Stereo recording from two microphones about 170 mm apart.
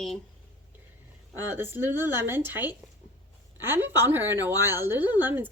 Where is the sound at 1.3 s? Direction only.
10° right (ahead or behind).